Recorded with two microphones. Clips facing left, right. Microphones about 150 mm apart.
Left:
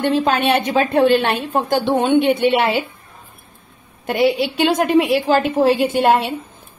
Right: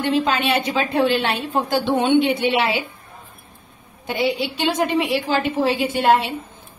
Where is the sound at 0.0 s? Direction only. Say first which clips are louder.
Left 3 dB; 50° left (ahead or behind).